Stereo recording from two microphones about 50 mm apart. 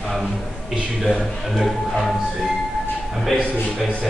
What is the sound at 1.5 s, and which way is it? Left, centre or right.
Speech, centre.